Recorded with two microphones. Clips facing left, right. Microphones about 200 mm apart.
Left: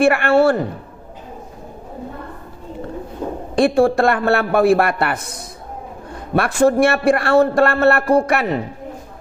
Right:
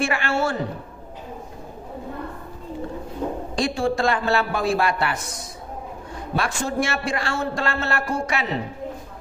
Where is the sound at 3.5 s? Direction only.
60° left (ahead or behind).